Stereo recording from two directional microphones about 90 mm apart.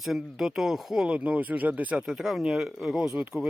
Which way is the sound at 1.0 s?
15° right (ahead or behind).